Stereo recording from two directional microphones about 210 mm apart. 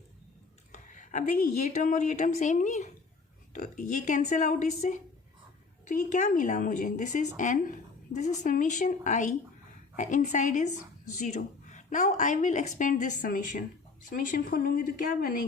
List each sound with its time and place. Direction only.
0.7 s a woman's voice: 35° left (ahead or behind)